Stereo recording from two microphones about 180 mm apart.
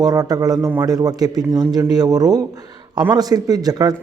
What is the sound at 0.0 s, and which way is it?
A man's voice, 20° right (ahead or behind).